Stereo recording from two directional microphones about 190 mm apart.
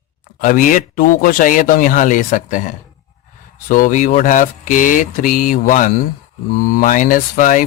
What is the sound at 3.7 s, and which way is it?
Speech, 45° left (ahead or behind).